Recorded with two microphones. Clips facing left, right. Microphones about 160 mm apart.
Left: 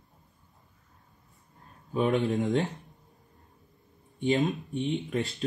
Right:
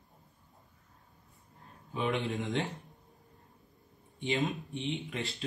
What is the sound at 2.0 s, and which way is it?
Speech, 40° left (ahead or behind).